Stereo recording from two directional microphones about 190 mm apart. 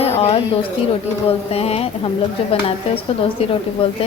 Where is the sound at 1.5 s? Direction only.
30° left (ahead or behind).